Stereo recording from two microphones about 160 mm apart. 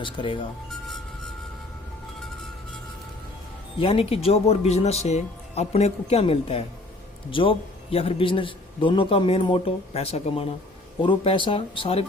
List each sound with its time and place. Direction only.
0.0 s a man's voice: 30° left (ahead or behind)
3.8 s a man's voice: 40° left (ahead or behind)